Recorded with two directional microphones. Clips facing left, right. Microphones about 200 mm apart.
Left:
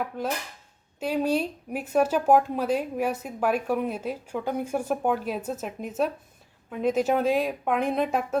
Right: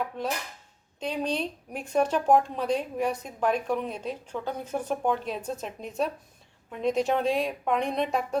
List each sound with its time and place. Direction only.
0.1 s speech: 5° left (ahead or behind)